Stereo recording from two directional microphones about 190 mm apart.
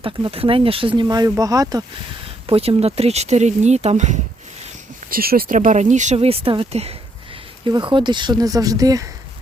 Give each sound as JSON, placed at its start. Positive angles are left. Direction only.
{"t": 0.0, "sound": "speech", "side_deg": -30}
{"t": 2.5, "sound": "speech", "side_deg": -30}
{"t": 5.1, "sound": "speech", "side_deg": -50}